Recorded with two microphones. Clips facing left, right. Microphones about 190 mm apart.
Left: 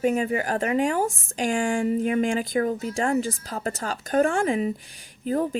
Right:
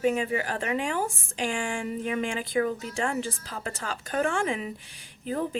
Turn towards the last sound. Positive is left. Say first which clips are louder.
# left 5 dB
turn(degrees=40)  # may be behind; listen again after turning